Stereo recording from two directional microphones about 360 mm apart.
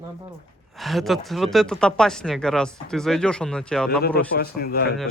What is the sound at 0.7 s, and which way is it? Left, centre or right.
Speech, centre.